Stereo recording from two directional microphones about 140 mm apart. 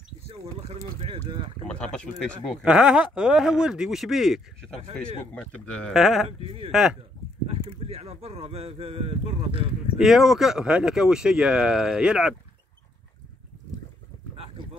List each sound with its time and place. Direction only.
0.3 s speech: 45° right (ahead or behind)
1.7 s speech: 5° left (ahead or behind)
2.6 s speech: 5° right (ahead or behind)
6.4 s speech: 45° right (ahead or behind)
6.7 s speech: 5° right (ahead or behind)
7.4 s speech: 45° right (ahead or behind)
9.9 s speech: centre (ahead or behind)